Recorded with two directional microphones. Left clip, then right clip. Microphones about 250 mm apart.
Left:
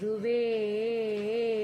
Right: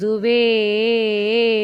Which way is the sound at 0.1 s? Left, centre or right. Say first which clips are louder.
Right 12 dB; right.